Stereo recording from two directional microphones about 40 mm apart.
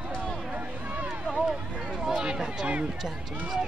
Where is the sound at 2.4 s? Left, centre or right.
Right.